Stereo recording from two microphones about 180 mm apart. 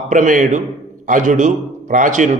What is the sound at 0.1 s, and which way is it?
A man's voice, 45° right (ahead or behind).